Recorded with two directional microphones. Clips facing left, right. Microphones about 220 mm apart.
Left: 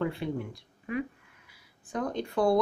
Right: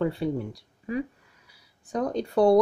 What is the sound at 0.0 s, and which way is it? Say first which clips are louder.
A woman's voice: right 5 dB; 35° right (ahead or behind).